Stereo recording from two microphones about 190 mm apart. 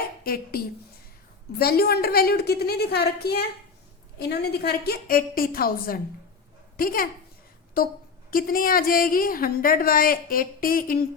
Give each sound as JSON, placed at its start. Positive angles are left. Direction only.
{"t": 0.3, "sound": "a woman's voice", "side_deg": 50}
{"t": 1.5, "sound": "a woman's voice", "side_deg": 55}